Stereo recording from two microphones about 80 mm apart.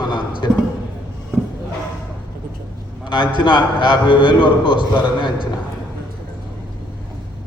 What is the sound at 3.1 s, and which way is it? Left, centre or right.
A man's voice, left.